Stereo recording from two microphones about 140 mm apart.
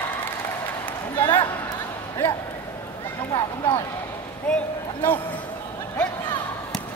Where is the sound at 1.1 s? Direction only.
30° left (ahead or behind).